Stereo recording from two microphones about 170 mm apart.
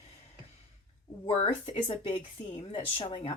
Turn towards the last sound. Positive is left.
turn(degrees=35)  # may be behind; listen again after turning